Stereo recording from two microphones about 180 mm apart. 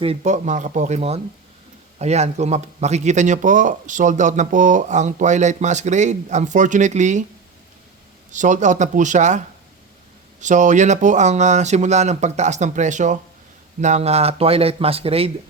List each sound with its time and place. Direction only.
0.0 s a man's voice: 35° right (ahead or behind)
8.3 s speech: 45° right (ahead or behind)
10.4 s a man's voice: 45° right (ahead or behind)